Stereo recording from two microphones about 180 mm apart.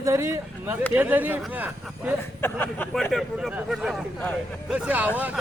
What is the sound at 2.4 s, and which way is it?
Speech, 10° left (ahead or behind).